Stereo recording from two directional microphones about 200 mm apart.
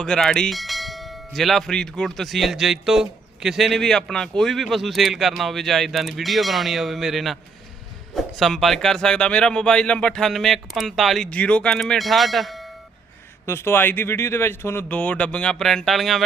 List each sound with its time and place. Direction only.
0.0 s bell: centre (ahead or behind)
13.4 s speech: 10° left (ahead or behind)